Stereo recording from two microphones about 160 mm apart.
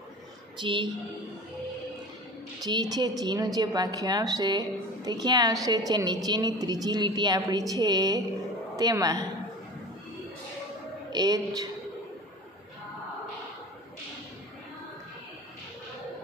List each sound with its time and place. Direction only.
0.6 s a woman's voice: 30° right (ahead or behind)
2.6 s a woman's voice: 25° right (ahead or behind)
11.1 s a woman's voice: 25° right (ahead or behind)